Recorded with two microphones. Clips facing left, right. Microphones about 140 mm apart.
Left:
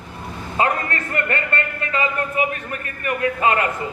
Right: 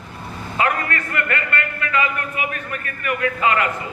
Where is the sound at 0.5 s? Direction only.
30° left (ahead or behind).